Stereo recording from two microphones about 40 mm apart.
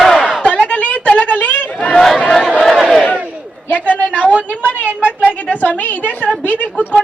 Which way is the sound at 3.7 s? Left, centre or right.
Left.